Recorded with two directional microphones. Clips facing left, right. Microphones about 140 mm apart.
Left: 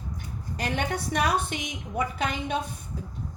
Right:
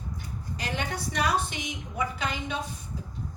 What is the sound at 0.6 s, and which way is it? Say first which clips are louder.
A woman's voice: left 4 dB; 55° left (ahead or behind).